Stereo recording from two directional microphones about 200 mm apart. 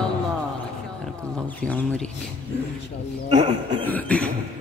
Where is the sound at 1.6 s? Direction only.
5° left (ahead or behind).